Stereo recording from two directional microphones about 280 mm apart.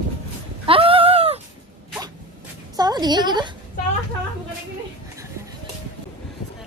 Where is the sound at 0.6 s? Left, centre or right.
Centre.